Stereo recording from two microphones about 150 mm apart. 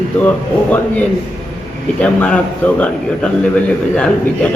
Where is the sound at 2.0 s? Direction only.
10° left (ahead or behind).